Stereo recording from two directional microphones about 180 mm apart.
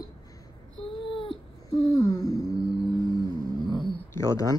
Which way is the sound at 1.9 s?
20° left (ahead or behind).